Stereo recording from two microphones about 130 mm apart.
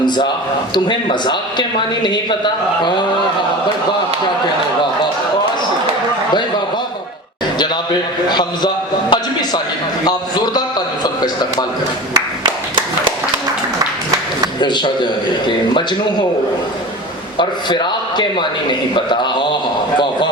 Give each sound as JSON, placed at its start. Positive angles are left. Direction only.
{"t": 1.2, "sound": "a man's voice", "side_deg": 35}
{"t": 8.3, "sound": "a sound", "side_deg": 35}
{"t": 12.1, "sound": "clapping", "side_deg": -40}
{"t": 14.6, "sound": "a man's voice", "side_deg": 35}
{"t": 17.3, "sound": "a man's voice", "side_deg": 35}